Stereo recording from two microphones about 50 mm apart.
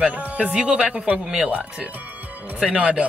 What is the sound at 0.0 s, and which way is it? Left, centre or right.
Speech, right.